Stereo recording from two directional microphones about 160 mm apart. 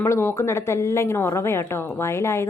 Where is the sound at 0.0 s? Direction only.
15° left (ahead or behind).